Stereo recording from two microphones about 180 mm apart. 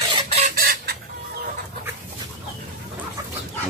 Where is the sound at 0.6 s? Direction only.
60° right (ahead or behind).